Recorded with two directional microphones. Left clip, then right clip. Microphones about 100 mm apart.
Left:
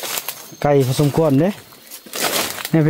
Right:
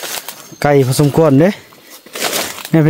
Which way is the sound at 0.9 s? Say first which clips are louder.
Right 5 dB; 65° right (ahead or behind).